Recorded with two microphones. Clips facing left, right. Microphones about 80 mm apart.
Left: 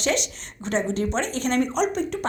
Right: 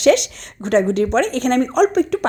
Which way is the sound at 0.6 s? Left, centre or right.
Right.